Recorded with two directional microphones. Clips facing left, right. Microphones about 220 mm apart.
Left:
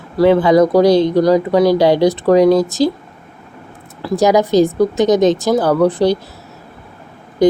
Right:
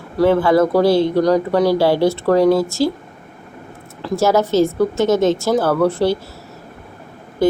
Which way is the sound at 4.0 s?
15° left (ahead or behind).